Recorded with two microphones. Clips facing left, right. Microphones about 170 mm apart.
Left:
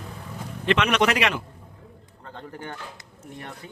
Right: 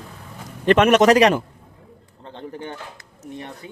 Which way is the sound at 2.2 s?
20° right (ahead or behind).